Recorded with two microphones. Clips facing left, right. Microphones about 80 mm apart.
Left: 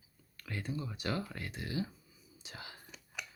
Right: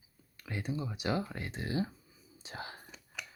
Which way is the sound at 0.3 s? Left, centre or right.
Centre.